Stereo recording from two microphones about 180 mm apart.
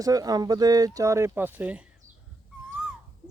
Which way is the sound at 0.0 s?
20° right (ahead or behind).